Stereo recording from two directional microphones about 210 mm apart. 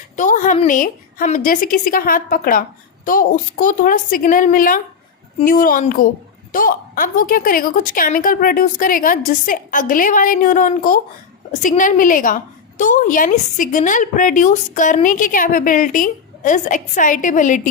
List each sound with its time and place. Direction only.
0.2 s a woman's voice: 35° left (ahead or behind)